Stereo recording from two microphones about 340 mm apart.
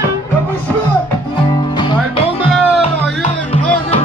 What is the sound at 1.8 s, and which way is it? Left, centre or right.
Music, centre.